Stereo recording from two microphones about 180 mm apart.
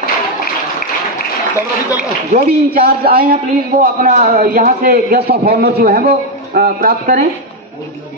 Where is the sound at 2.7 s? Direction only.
60° right (ahead or behind).